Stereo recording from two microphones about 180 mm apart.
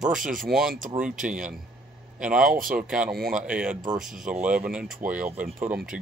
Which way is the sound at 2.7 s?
5° right (ahead or behind).